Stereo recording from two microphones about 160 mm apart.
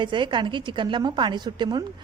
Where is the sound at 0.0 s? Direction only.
30° right (ahead or behind).